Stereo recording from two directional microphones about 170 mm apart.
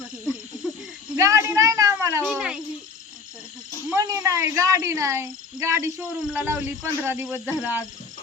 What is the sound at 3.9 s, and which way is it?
Speech, 20° right (ahead or behind).